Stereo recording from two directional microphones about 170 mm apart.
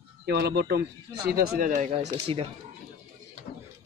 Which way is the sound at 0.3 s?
70° right (ahead or behind).